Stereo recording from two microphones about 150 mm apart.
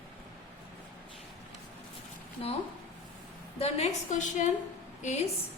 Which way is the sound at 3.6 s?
50° left (ahead or behind).